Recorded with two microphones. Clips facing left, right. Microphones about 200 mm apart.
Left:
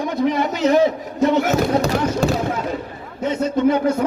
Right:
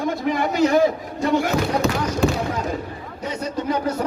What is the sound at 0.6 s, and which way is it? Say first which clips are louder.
Speech: left 2 dB; 20° left (ahead or behind).